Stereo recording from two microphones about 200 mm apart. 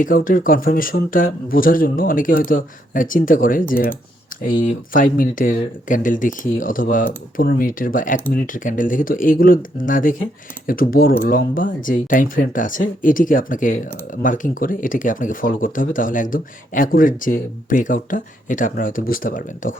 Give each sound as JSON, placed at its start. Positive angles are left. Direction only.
{"t": 0.0, "sound": "speech", "side_deg": 45}